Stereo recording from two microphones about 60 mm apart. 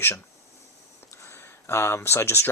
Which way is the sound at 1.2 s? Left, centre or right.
Left.